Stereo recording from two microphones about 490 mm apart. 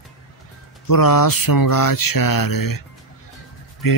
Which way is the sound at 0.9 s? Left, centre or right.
Left.